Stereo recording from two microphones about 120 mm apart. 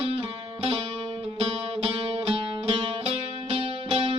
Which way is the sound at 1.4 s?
55° right (ahead or behind).